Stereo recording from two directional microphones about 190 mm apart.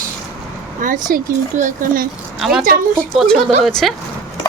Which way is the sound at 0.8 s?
45° right (ahead or behind).